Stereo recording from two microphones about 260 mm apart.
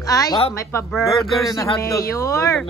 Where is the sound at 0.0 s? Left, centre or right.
Centre.